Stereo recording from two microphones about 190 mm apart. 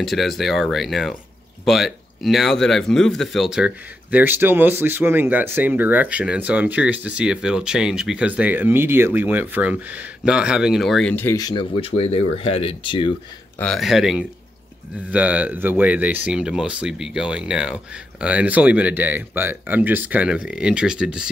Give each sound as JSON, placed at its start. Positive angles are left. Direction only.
{"t": 0.0, "sound": "speech", "side_deg": 0}
{"t": 13.6, "sound": "speech", "side_deg": 0}